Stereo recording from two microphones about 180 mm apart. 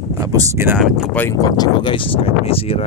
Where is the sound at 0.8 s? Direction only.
Centre (ahead or behind).